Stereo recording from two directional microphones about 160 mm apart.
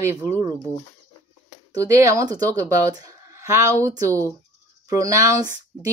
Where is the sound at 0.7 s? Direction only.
10° left (ahead or behind).